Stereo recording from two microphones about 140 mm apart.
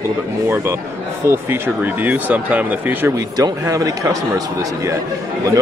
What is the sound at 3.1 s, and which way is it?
Speech, 25° right (ahead or behind).